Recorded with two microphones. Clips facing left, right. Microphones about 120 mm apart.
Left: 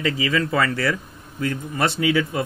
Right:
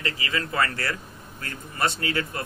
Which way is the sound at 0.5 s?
90° left.